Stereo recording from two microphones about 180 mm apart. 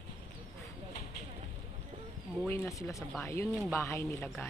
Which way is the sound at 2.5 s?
15° left (ahead or behind).